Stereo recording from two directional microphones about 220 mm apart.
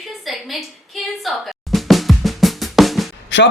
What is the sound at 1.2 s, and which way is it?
Drum, centre (ahead or behind).